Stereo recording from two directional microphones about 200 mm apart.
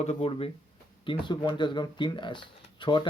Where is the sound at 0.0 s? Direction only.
30° left (ahead or behind).